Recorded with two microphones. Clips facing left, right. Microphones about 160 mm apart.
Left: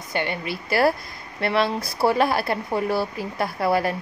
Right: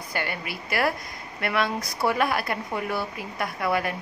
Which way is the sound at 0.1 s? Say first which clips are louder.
Left 5 dB; 25° left (ahead or behind).